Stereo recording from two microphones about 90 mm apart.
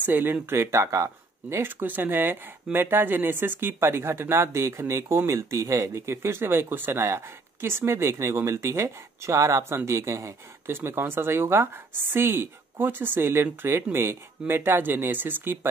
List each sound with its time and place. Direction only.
0.0 s speech: 20° right (ahead or behind)